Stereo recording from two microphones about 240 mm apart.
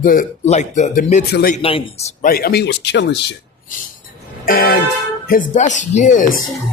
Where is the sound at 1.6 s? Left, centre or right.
Left.